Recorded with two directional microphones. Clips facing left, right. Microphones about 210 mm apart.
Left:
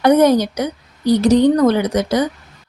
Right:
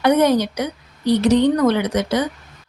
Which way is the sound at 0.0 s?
40° left (ahead or behind).